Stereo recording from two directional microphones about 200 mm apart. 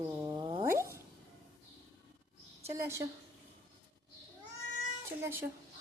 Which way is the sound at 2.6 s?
15° right (ahead or behind).